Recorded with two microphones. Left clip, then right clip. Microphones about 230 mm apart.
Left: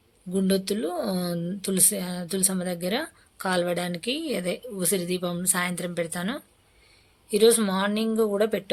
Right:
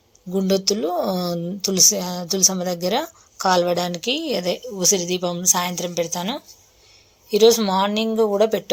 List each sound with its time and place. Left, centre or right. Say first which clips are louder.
0.3 s speech: right 6 dB; centre